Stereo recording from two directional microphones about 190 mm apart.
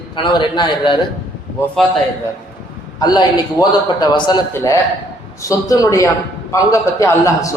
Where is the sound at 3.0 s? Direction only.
20° left (ahead or behind).